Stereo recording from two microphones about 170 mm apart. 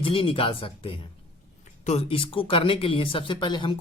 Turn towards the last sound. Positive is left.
turn(degrees=25)  # may be behind; listen again after turning